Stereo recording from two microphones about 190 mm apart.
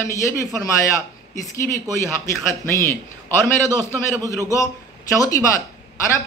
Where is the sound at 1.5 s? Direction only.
15° left (ahead or behind).